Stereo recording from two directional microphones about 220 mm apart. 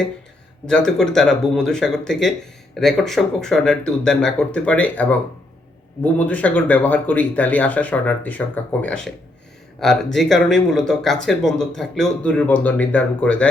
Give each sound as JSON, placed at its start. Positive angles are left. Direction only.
{"t": 0.7, "sound": "speech", "side_deg": 0}